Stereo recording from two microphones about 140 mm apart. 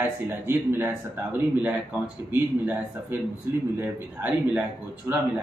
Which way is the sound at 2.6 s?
10° right (ahead or behind).